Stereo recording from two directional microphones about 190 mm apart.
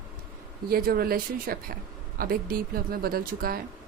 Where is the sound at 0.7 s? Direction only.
50° right (ahead or behind).